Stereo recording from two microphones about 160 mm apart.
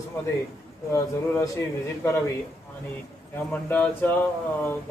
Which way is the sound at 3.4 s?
10° left (ahead or behind).